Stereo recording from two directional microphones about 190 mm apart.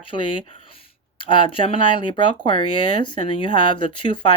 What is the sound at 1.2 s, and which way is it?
Speech, 25° left (ahead or behind).